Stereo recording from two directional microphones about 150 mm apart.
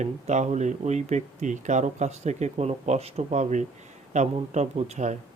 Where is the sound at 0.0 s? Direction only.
50° right (ahead or behind).